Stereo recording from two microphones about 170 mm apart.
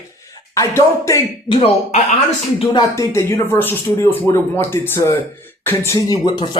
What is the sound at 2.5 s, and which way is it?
Speech, 20° left (ahead or behind).